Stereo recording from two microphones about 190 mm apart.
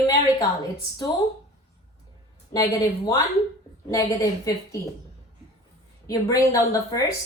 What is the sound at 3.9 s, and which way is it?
Speech, 15° left (ahead or behind).